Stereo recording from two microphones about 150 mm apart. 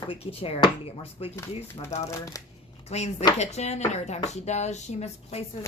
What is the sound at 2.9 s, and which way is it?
Speech, 45° left (ahead or behind).